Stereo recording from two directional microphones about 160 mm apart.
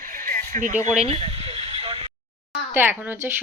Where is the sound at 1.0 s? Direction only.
40° right (ahead or behind).